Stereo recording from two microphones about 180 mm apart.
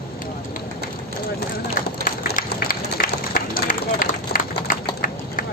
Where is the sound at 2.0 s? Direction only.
50° left (ahead or behind).